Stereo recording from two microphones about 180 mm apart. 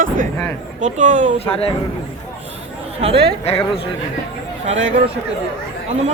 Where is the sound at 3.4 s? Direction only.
35° left (ahead or behind).